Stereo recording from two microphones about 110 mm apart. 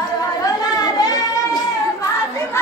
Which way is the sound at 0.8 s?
35° left (ahead or behind).